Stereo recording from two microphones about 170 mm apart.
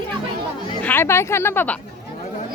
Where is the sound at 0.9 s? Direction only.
15° left (ahead or behind).